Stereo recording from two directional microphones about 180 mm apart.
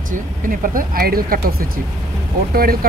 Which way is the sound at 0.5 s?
50° right (ahead or behind).